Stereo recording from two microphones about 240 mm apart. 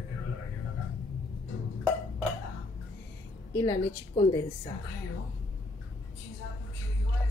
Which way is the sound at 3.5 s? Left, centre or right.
Centre.